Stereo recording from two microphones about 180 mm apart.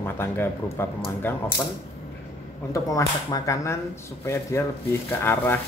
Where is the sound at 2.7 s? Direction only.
20° left (ahead or behind).